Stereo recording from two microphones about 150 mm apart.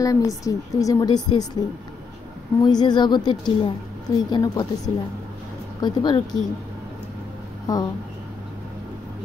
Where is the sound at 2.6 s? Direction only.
30° left (ahead or behind).